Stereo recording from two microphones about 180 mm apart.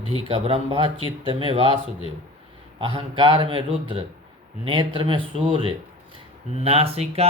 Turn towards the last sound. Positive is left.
turn(degrees=-35)  # may be behind; listen again after turning